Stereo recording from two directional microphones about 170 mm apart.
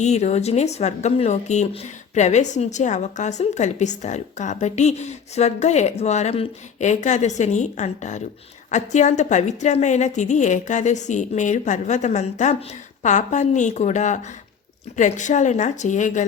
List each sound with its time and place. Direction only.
0.0 s speech: 40° left (ahead or behind)